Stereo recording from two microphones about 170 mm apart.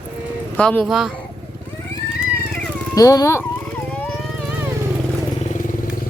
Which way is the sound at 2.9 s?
20° left (ahead or behind).